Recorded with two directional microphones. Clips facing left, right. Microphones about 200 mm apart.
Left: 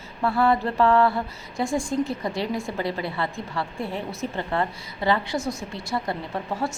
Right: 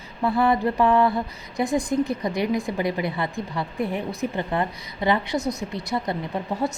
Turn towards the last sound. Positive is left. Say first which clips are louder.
# right 2 dB
turn(degrees=-20)  # may be behind; listen again after turning